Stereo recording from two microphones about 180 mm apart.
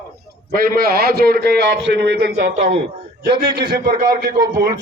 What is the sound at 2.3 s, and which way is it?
Speech, 45° right (ahead or behind).